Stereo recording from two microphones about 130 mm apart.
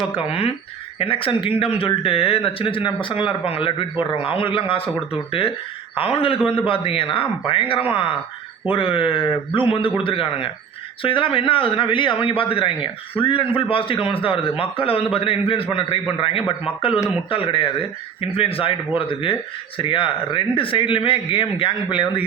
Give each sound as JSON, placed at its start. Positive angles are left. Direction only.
{"t": 0.2, "sound": "speech", "side_deg": 50}
{"t": 17.2, "sound": "speech", "side_deg": 45}